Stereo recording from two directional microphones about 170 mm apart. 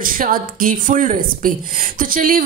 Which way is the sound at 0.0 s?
55° right (ahead or behind).